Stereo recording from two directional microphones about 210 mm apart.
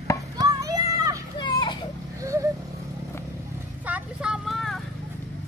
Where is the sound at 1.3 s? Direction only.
20° left (ahead or behind).